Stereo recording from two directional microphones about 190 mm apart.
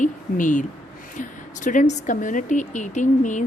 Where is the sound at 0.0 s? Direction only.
40° left (ahead or behind).